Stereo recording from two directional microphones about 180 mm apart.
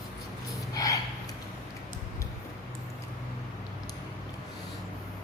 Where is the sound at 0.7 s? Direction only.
20° left (ahead or behind).